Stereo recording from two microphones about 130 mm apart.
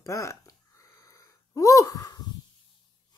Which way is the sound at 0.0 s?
25° left (ahead or behind).